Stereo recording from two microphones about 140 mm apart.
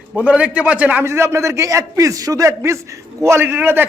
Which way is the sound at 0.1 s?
10° right (ahead or behind).